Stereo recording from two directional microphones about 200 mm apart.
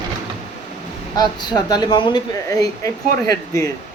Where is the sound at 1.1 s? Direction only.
20° left (ahead or behind).